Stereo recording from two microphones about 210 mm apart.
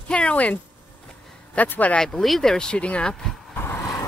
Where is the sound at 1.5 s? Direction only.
10° left (ahead or behind).